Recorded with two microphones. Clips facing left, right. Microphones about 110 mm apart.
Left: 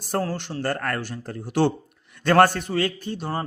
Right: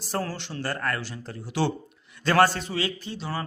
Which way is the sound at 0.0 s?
50° left (ahead or behind).